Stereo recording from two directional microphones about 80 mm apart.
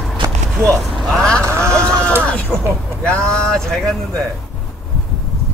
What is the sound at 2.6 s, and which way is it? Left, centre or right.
Speech, right.